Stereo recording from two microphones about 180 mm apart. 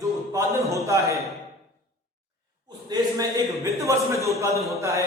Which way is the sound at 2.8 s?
20° right (ahead or behind).